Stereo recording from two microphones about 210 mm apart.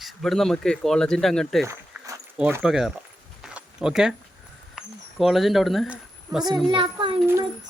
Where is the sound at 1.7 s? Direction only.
15° right (ahead or behind).